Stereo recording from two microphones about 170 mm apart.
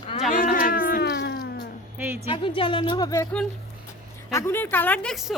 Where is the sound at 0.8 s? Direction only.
65° left (ahead or behind); by 1.3 s 90° left.